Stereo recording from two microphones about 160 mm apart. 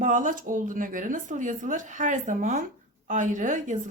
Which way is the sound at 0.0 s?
50° right (ahead or behind).